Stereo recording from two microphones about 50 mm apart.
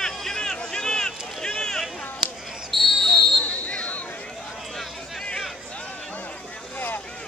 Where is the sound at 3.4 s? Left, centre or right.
Left.